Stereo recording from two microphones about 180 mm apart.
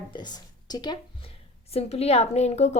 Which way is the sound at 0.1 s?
25° left (ahead or behind).